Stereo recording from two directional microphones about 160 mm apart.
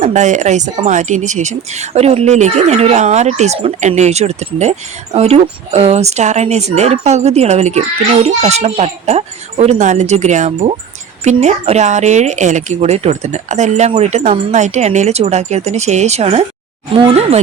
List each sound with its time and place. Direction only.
0.0 s speech: 50° right (ahead or behind)